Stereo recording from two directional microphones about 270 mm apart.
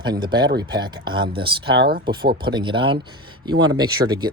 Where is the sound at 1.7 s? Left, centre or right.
Right.